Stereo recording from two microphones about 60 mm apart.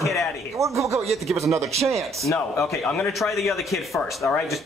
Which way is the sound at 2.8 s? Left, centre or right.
Centre.